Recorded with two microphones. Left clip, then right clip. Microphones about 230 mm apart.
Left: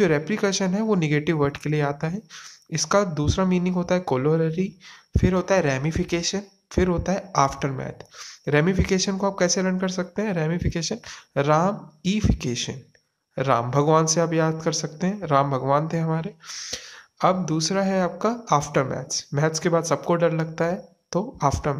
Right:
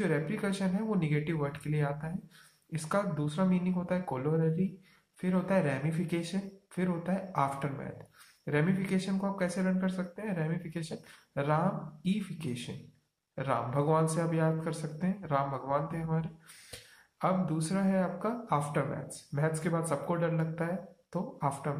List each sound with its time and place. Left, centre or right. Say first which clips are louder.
0.0 s speech: left 11 dB; left